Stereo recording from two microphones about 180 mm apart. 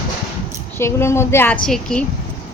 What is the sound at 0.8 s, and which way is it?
A woman's voice, 15° left (ahead or behind).